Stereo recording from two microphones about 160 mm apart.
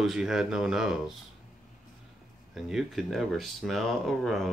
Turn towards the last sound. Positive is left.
turn(degrees=0)  # may be behind; listen again after turning